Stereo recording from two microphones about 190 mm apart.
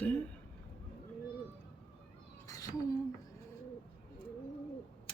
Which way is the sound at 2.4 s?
15° left (ahead or behind).